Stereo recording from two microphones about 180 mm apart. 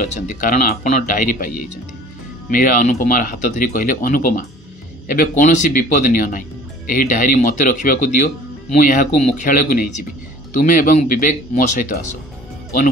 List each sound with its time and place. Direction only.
0.0 s speech: 50° left (ahead or behind)
2.5 s speech: 50° left (ahead or behind)